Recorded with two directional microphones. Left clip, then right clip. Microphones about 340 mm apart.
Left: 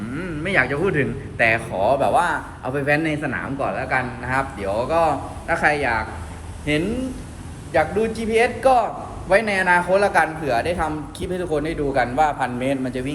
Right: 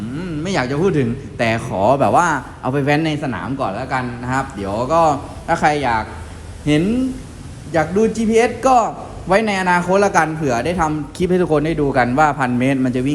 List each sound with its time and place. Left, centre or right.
0.2 s a man's voice: centre
7.8 s a man's voice: centre